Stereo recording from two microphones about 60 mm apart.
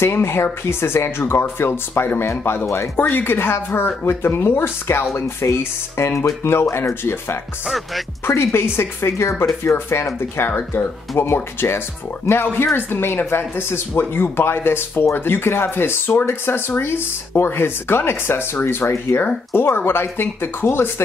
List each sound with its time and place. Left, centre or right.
0.0 s speech: left
7.6 s music: centre
8.3 s speech: left